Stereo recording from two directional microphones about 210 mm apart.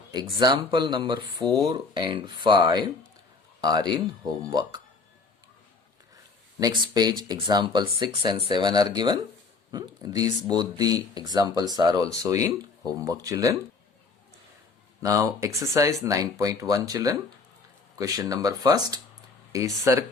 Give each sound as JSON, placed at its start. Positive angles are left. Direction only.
{"t": 0.1, "sound": "a man's voice", "side_deg": -20}
{"t": 6.6, "sound": "speech", "side_deg": -20}
{"t": 15.0, "sound": "speech", "side_deg": -15}